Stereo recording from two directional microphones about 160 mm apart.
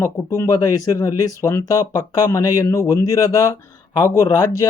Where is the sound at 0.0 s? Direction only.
15° left (ahead or behind).